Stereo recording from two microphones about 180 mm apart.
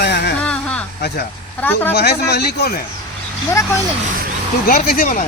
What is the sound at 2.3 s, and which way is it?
Speech, 65° left (ahead or behind).